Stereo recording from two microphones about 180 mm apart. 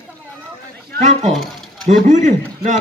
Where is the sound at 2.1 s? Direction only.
40° right (ahead or behind).